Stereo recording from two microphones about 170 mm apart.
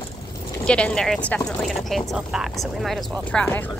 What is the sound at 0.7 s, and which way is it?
Speech, 5° left (ahead or behind).